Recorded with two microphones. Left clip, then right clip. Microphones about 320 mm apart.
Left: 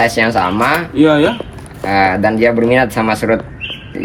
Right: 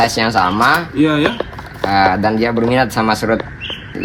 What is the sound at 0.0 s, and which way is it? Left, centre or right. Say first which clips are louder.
Speech: left 1 dB; centre.